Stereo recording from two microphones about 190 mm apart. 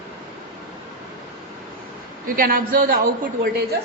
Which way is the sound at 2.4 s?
50° right (ahead or behind).